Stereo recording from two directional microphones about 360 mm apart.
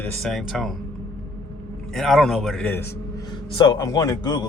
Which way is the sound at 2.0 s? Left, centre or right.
Centre.